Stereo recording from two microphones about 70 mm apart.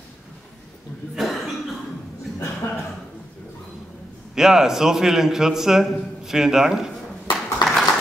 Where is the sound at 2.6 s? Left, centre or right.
Left.